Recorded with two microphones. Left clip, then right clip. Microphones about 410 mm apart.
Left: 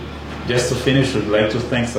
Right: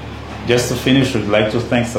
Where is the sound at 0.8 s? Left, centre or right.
Right.